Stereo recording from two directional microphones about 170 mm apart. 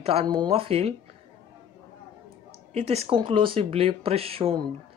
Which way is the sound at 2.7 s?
40° right (ahead or behind).